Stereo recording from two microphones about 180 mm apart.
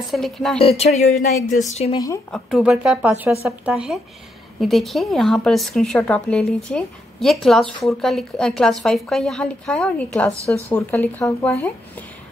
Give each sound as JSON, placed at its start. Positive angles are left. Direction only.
{"t": 0.1, "sound": "speech", "side_deg": 0}
{"t": 0.6, "sound": "speech", "side_deg": 35}
{"t": 2.3, "sound": "speech", "side_deg": 0}